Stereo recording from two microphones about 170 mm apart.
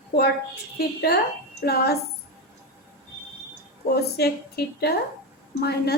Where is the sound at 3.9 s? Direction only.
70° left (ahead or behind).